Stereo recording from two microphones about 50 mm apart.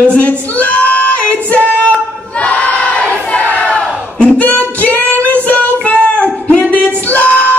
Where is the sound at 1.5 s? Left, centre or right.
Left.